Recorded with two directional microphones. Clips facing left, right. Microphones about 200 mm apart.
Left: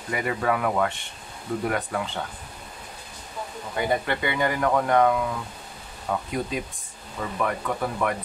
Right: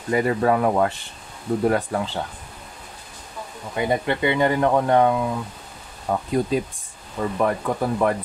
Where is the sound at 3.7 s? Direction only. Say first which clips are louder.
Right 3 dB; 20° right (ahead or behind).